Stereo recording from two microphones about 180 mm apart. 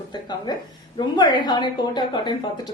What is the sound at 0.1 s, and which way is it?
A woman's voice, 25° left (ahead or behind).